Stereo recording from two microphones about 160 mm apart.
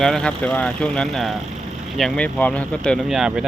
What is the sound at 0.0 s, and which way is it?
Speech, 5° left (ahead or behind).